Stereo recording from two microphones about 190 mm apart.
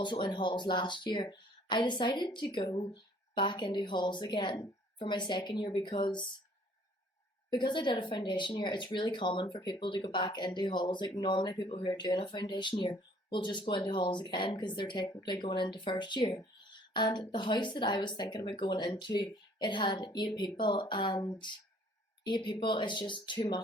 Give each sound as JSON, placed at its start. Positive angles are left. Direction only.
{"t": 0.0, "sound": "speech", "side_deg": 25}
{"t": 7.5, "sound": "speech", "side_deg": 25}